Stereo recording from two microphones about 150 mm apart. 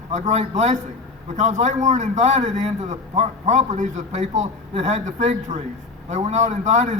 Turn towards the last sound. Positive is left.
turn(degrees=-50)  # may be behind; listen again after turning